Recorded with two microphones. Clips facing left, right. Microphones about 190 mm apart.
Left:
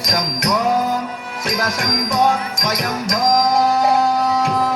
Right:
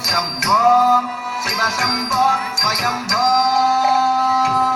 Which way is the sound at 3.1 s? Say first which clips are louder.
Left 1 dB; 15° left (ahead or behind).